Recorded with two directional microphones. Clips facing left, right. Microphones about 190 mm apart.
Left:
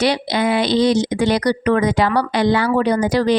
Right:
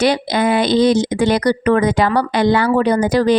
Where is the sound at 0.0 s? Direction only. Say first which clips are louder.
Right 2 dB; 50° right (ahead or behind).